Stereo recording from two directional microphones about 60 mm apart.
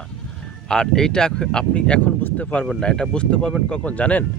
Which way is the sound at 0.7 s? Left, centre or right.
Centre.